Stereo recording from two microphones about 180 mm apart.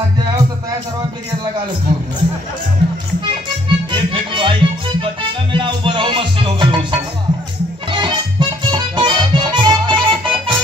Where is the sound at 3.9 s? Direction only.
30° right (ahead or behind).